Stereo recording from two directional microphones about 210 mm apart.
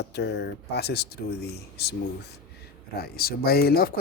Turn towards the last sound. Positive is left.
turn(degrees=45)  # may be behind; listen again after turning